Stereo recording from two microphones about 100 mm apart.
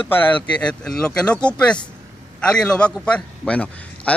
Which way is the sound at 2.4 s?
10° left (ahead or behind).